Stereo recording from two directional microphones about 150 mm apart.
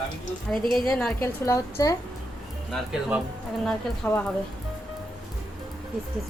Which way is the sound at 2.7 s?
5° right (ahead or behind).